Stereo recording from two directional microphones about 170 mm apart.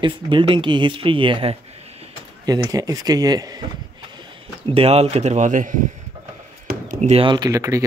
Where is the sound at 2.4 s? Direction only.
20° right (ahead or behind); by 5.8 s 50° right (ahead or behind).